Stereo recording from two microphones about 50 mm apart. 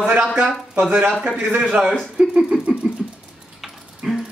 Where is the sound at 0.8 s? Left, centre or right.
Right.